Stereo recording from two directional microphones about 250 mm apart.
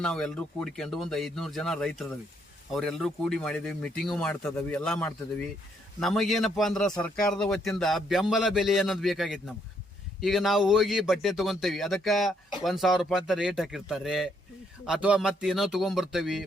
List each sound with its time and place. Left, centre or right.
0.0 s a man's voice: centre